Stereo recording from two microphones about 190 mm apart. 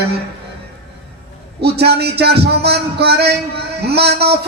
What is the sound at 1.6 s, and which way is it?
A man's voice, 60° right (ahead or behind).